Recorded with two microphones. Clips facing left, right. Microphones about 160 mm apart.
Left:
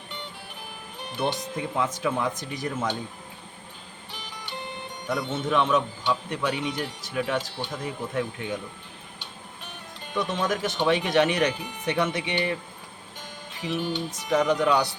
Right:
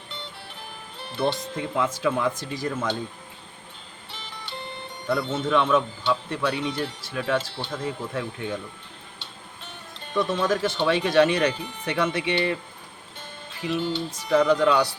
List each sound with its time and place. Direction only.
0.9 s a man's voice: 15° left (ahead or behind)
5.0 s a man's voice: 15° left (ahead or behind)
10.2 s a man's voice: 15° left (ahead or behind)
13.6 s music: 15° left (ahead or behind)